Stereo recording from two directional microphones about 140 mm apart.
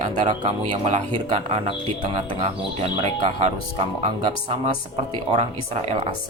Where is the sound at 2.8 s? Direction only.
50° right (ahead or behind).